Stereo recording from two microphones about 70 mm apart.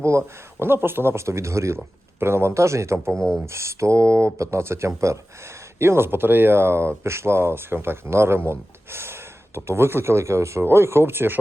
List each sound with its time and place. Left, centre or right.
0.0 s speech: right
3.2 s speech: centre
3.4 s speech: right